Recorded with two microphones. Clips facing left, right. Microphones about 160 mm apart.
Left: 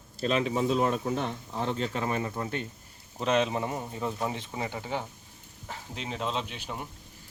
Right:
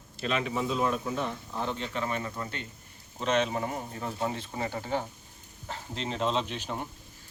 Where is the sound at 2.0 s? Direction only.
20° left (ahead or behind).